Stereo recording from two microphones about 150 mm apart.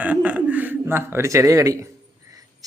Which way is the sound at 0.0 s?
10° right (ahead or behind).